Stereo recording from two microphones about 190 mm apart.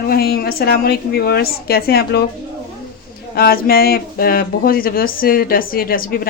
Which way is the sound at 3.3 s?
55° left (ahead or behind).